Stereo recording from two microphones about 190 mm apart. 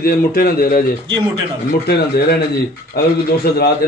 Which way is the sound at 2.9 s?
55° left (ahead or behind).